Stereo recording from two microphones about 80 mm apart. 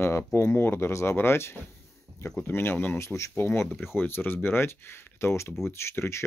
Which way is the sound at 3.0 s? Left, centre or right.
Left.